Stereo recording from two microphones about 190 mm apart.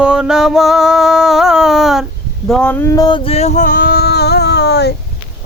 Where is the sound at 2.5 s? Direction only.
5° left (ahead or behind); by 4.9 s 60° left (ahead or behind).